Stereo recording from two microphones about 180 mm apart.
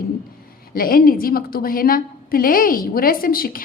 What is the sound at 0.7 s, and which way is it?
A woman's voice, 55° left (ahead or behind).